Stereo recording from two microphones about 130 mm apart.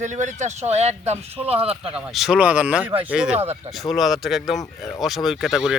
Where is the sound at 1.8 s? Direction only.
5° right (ahead or behind).